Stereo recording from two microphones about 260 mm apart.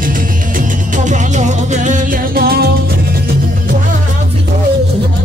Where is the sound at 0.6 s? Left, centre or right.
Right.